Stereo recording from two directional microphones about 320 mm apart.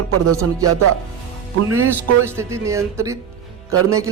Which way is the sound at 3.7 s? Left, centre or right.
Right.